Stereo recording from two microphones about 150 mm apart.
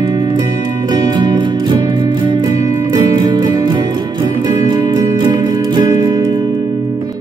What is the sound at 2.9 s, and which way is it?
Music, 30° right (ahead or behind).